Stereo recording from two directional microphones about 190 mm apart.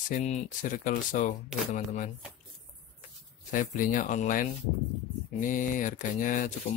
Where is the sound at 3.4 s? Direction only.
45° left (ahead or behind).